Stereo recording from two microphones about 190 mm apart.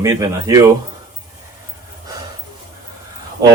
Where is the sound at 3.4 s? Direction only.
20° right (ahead or behind).